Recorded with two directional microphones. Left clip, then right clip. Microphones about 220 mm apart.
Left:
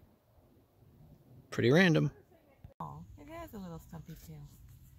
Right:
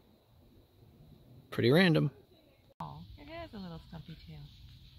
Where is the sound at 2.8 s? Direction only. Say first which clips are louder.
Even; 25° left (ahead or behind).